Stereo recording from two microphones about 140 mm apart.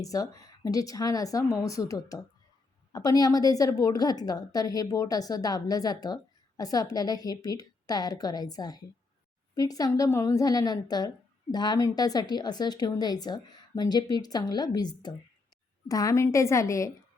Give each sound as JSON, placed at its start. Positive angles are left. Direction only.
{"t": 0.0, "sound": "a woman's voice", "side_deg": 25}